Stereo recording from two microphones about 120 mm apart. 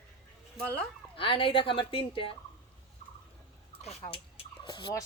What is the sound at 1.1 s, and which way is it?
Speech, 45° left (ahead or behind).